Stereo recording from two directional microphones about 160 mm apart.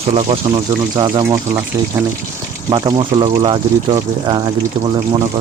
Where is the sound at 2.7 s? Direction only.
30° right (ahead or behind).